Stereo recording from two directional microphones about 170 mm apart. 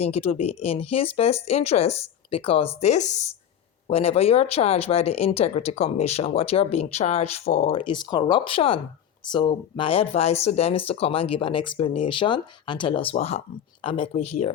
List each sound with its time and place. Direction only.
0.0 s speech: 35° left (ahead or behind)